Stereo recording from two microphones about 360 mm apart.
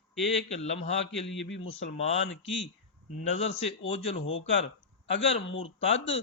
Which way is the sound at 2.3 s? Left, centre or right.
Left.